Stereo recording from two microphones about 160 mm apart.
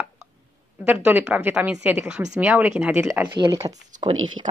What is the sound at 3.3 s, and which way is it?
Speech, 30° right (ahead or behind).